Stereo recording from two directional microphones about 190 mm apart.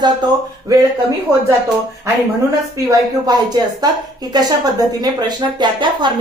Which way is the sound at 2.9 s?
20° right (ahead or behind).